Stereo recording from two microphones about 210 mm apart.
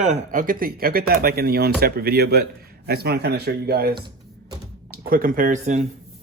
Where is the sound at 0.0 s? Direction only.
35° right (ahead or behind).